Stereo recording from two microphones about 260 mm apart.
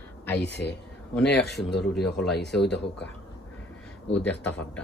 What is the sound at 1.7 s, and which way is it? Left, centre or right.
Speech, left.